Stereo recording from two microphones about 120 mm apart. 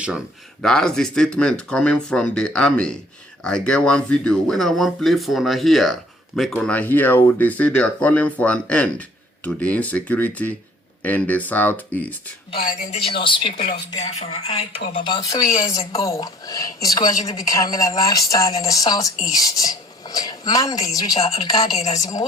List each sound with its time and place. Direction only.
0.6 s speech: 5° left (ahead or behind)
12.9 s speech: 50° left (ahead or behind)
14.0 s speech: 60° left (ahead or behind); by 21.2 s 30° left (ahead or behind)
21.2 s speech: 55° left (ahead or behind)
21.9 s speech: 30° left (ahead or behind)